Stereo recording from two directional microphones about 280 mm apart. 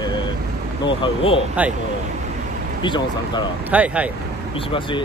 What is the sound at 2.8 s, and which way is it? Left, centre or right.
Speech, centre.